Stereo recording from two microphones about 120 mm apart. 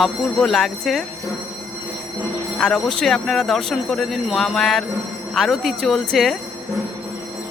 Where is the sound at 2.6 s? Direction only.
5° left (ahead or behind).